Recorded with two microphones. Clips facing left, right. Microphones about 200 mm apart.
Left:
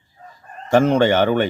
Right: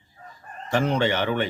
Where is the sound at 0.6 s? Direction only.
45° left (ahead or behind).